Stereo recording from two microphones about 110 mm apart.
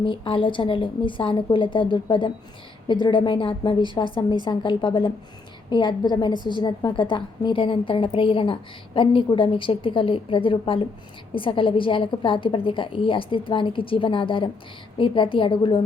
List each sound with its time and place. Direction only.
0.0 s a woman's voice: 50° left (ahead or behind)
5.7 s a woman's voice: 40° left (ahead or behind)